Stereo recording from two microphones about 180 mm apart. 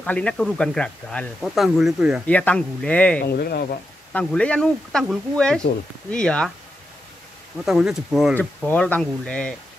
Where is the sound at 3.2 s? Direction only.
55° left (ahead or behind).